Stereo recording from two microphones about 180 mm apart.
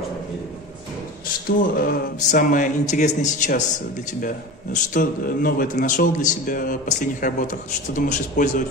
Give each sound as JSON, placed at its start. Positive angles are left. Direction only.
{"t": 1.6, "sound": "speech", "side_deg": 50}
{"t": 4.7, "sound": "speech", "side_deg": 50}